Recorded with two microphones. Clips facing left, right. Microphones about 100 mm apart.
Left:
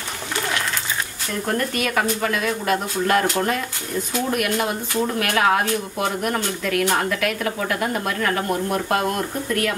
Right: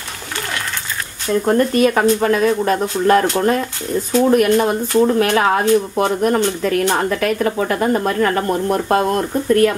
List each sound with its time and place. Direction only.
1.5 s a woman's voice: 30° right (ahead or behind)
5.0 s a woman's voice: 25° right (ahead or behind)